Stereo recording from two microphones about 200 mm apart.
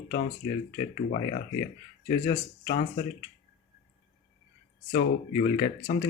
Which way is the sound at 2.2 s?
35° left (ahead or behind).